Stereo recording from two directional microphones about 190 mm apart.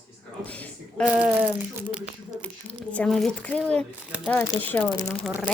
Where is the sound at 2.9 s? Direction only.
5° left (ahead or behind).